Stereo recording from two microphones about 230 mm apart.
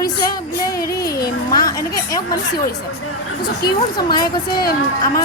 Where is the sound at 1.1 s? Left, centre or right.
Left.